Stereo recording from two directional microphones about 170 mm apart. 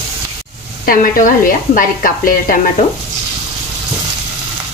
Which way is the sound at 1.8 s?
55° left (ahead or behind).